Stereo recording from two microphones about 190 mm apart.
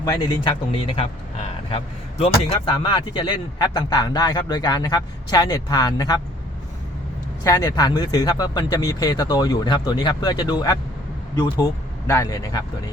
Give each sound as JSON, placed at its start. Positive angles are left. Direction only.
{"t": 0.0, "sound": "speech", "side_deg": 20}
{"t": 7.4, "sound": "speech", "side_deg": 20}